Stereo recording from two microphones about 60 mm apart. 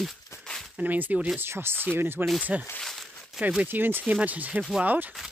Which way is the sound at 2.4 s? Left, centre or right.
Right.